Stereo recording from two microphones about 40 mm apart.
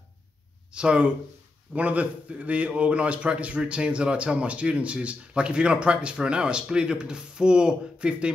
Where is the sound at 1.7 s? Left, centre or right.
Right.